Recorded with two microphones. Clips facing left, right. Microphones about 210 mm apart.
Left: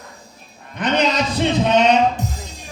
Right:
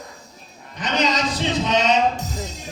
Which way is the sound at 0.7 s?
60° left (ahead or behind).